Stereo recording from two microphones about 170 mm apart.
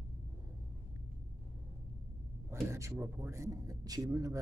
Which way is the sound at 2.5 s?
15° right (ahead or behind).